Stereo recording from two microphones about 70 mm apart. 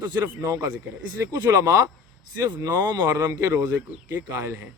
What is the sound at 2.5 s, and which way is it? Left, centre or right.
Speech, right.